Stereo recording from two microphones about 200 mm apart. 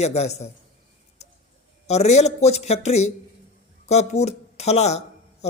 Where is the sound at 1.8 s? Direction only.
35° left (ahead or behind).